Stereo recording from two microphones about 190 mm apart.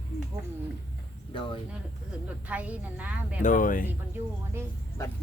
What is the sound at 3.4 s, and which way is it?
Speech, 45° left (ahead or behind).